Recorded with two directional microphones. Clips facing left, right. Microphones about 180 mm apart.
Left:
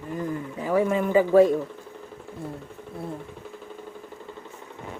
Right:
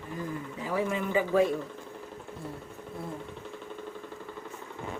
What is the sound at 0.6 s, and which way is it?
Speech, 50° left (ahead or behind).